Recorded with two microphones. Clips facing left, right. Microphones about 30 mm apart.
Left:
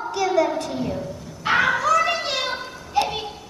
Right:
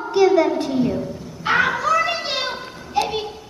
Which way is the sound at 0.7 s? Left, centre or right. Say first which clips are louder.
Right 6 dB; centre.